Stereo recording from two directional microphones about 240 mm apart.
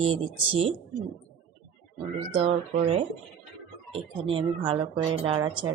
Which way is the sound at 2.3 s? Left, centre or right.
Right.